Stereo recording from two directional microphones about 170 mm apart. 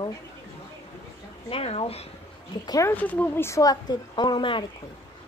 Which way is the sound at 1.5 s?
35° left (ahead or behind).